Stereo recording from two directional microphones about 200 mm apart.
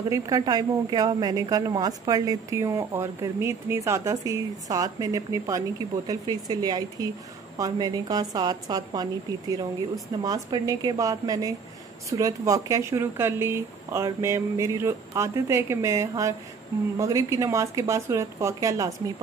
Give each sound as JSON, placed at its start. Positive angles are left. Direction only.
{"t": 0.1, "sound": "a woman's voice", "side_deg": -20}